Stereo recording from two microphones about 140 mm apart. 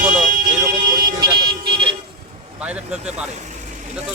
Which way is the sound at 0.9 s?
30° right (ahead or behind).